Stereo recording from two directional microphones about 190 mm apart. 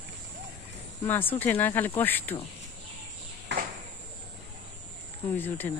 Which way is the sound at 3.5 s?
70° right (ahead or behind).